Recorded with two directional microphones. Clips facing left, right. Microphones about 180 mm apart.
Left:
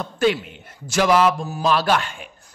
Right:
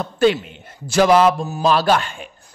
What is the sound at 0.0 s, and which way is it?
A man's voice, 30° right (ahead or behind).